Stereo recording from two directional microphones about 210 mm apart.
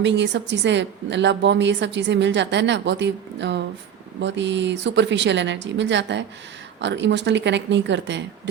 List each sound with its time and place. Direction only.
0.0 s a woman's voice: 60° right (ahead or behind)